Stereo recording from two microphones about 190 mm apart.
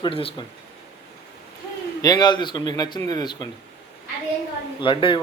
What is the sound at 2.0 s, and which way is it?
Speech, 20° left (ahead or behind).